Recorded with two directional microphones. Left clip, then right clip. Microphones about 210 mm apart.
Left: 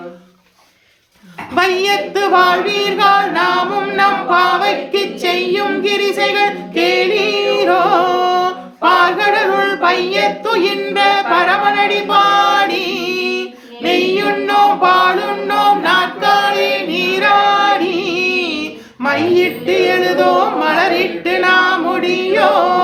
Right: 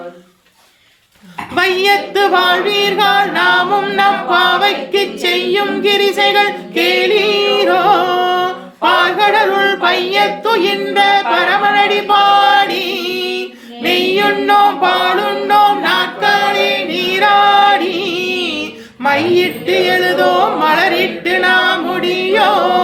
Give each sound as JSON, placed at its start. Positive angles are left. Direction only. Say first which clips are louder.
{"t": 1.5, "sound": "singing", "louder": "right 2 dB", "side_deg": 5}
{"t": 13.8, "sound": "music", "louder": "right 2 dB", "side_deg": 5}